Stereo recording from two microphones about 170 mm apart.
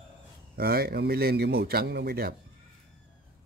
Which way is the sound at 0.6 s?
65° right (ahead or behind).